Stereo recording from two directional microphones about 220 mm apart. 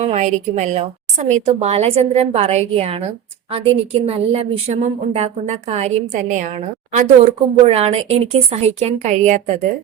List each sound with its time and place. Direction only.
0.0 s a woman's voice: 30° right (ahead or behind)